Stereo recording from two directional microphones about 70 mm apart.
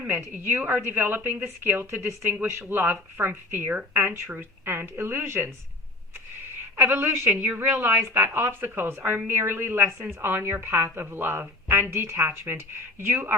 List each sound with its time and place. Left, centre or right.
0.0 s a woman's voice: right
1.8 s speech: right
2.3 s a woman's voice: right
6.8 s speech: right
7.3 s a woman's voice: right